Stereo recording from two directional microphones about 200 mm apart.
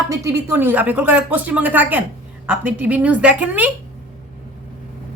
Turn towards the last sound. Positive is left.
turn(degrees=-5)  # may be behind; listen again after turning